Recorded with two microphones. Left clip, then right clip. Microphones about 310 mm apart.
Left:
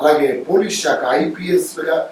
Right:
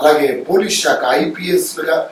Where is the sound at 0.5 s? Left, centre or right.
Centre.